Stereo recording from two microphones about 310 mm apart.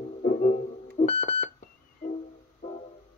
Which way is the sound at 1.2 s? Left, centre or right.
Left.